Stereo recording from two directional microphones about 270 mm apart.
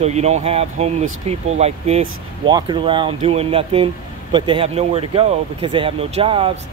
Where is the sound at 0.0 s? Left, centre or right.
Right.